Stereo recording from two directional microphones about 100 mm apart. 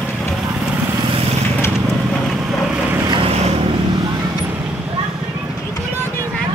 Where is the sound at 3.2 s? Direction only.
90° right.